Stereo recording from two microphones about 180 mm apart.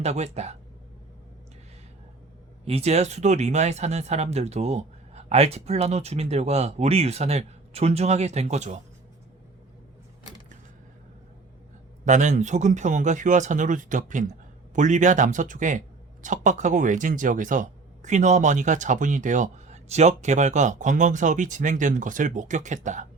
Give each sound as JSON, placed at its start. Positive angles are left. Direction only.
{"t": 0.0, "sound": "speech", "side_deg": -35}
{"t": 2.6, "sound": "speech", "side_deg": -35}
{"t": 12.0, "sound": "speech", "side_deg": -40}